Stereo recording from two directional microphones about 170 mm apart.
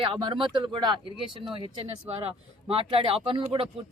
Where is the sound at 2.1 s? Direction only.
35° right (ahead or behind).